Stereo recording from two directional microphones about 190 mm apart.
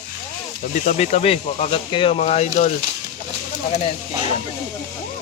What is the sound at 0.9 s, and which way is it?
Speech, 35° left (ahead or behind).